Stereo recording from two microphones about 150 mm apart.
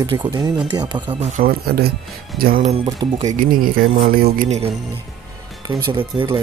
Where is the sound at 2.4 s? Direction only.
75° right (ahead or behind).